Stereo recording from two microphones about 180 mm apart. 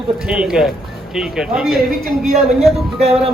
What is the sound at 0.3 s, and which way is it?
Speech, 5° right (ahead or behind).